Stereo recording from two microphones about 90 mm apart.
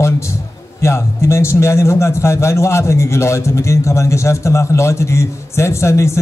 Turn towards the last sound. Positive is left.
turn(degrees=30)  # may be behind; listen again after turning